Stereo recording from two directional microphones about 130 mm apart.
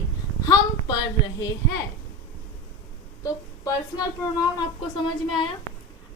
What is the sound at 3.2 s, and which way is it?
Speech, 25° left (ahead or behind).